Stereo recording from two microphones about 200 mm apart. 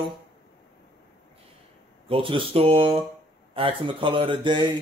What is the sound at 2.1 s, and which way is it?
Speech, 25° right (ahead or behind).